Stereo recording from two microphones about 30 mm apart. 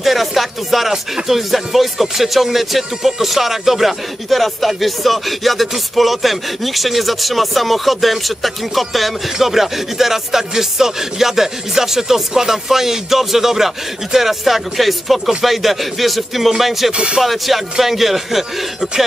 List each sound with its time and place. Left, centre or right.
0.0 s speech: centre
16.9 s speech: right
17.2 s speech: centre